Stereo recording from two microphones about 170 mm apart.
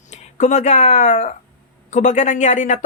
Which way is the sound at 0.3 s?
45° left (ahead or behind).